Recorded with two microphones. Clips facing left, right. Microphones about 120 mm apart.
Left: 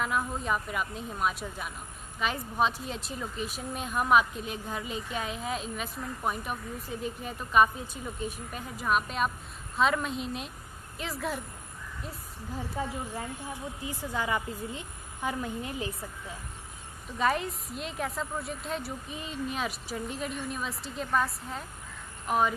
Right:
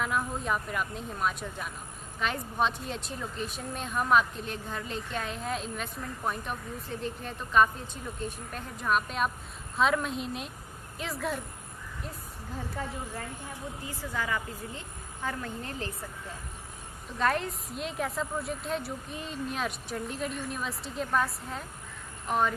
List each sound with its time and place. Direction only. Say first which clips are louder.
0.0 s a woman's voice: even; centre (ahead or behind)
12.8 s a woman's voice: left 4 dB; 10° left (ahead or behind)
17.2 s a woman's voice: even; centre (ahead or behind)